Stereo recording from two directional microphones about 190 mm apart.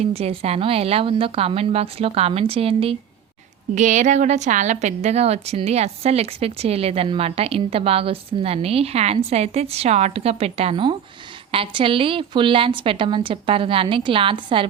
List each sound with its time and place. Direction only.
0.0 s a woman's voice: 30° right (ahead or behind)